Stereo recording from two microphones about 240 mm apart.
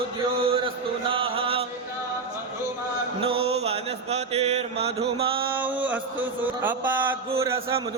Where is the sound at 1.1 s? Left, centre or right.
Right.